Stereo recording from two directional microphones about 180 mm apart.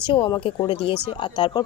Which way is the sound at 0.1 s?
30° left (ahead or behind).